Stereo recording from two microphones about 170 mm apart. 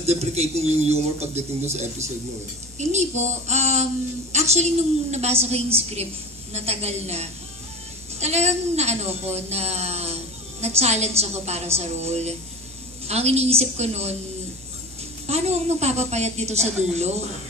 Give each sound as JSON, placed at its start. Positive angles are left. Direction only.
{"t": 0.0, "sound": "a woman's voice", "side_deg": -40}
{"t": 15.2, "sound": "a woman's voice", "side_deg": -40}